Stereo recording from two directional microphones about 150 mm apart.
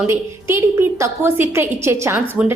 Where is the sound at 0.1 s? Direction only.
15° right (ahead or behind).